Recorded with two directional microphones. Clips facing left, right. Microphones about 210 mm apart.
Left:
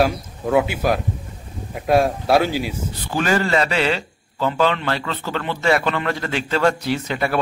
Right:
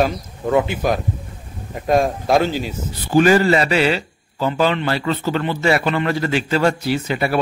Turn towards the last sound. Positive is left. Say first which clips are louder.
# right 2 dB
turn(degrees=-5)  # may be behind; listen again after turning